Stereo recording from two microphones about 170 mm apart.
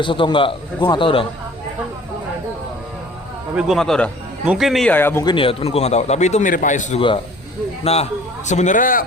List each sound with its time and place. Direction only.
0.0 s a man's voice: 30° left (ahead or behind)
3.5 s speech: 5° right (ahead or behind); by 5.2 s 10° left (ahead or behind)
5.2 s a man's voice: 30° left (ahead or behind); by 7.0 s 50° left (ahead or behind)
7.9 s a man's voice: 35° left (ahead or behind); by 9.0 s 50° left (ahead or behind)